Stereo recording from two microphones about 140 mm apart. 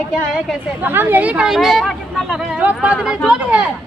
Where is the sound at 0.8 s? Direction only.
15° right (ahead or behind); by 2.2 s centre (ahead or behind).